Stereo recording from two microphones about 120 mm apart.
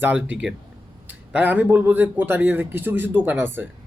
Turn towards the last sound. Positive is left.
turn(degrees=-20)  # may be behind; listen again after turning